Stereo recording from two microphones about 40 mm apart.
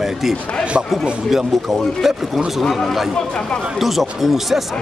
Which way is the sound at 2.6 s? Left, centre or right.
Centre.